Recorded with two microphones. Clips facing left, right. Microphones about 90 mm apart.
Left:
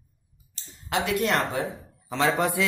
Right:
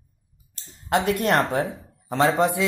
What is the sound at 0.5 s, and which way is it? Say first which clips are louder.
Speech: right 5 dB; 45° right (ahead or behind).